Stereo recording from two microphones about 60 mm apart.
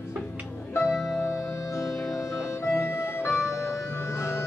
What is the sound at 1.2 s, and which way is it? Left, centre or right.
Music, left.